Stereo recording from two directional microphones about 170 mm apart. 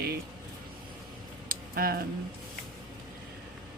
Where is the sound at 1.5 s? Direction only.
60° right (ahead or behind).